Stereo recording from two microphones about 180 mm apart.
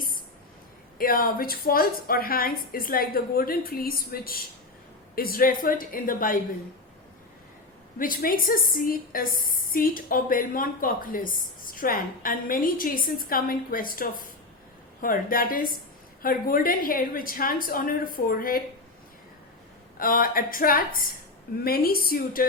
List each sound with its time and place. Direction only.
0.9 s a woman's voice: 55° left (ahead or behind)
7.9 s a woman's voice: 50° left (ahead or behind)
20.0 s a woman's voice: 50° left (ahead or behind)